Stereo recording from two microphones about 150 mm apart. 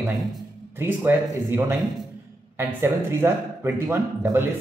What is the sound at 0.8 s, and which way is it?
Speech, 15° right (ahead or behind).